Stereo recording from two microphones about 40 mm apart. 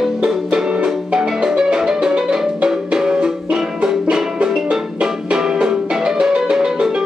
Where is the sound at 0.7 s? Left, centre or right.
Right.